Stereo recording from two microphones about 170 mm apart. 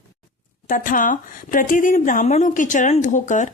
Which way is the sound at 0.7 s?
50° left (ahead or behind).